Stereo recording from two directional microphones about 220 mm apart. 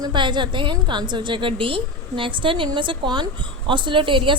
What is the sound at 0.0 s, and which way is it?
A woman's voice, 20° right (ahead or behind).